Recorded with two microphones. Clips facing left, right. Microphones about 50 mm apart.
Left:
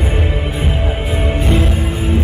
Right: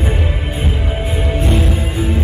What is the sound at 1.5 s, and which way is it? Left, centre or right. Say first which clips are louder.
Music: left 2 dB; centre.